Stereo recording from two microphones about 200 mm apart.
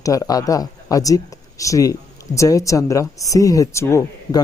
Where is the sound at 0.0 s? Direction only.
15° left (ahead or behind).